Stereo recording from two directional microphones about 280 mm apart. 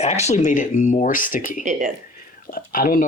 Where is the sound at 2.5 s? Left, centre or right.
Left.